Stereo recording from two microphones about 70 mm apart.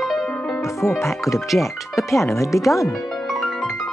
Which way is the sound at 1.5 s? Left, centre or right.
Centre.